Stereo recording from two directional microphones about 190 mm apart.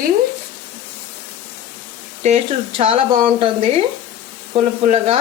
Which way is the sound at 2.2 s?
35° right (ahead or behind).